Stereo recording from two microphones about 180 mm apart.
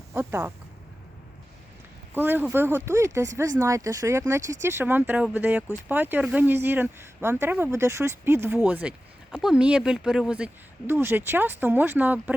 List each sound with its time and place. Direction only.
0.1 s speech: 15° right (ahead or behind)
2.1 s a woman's voice: 10° right (ahead or behind)